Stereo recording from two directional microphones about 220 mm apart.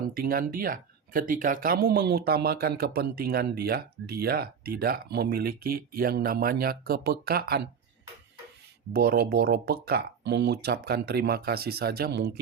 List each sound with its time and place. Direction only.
0.2 s speech: 40° right (ahead or behind)
8.9 s speech: 45° right (ahead or behind)